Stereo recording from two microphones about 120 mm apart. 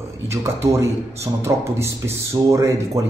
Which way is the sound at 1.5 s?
20° right (ahead or behind).